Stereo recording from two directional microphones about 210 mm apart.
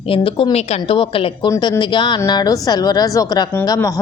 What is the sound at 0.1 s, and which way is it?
A woman's voice, 25° left (ahead or behind).